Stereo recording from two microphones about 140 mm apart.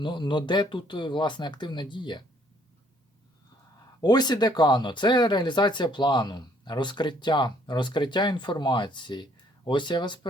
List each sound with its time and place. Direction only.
0.0 s speech: 35° left (ahead or behind)
4.0 s speech: 30° left (ahead or behind)